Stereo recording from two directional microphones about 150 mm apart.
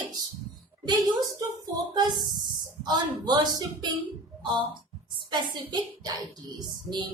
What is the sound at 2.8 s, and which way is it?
Speech, 30° right (ahead or behind).